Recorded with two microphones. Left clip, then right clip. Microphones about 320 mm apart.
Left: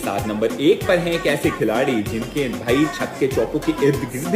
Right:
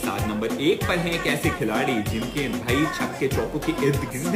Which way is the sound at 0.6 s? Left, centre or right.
Centre.